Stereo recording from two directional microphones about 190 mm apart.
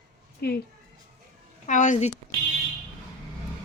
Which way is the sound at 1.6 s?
40° left (ahead or behind).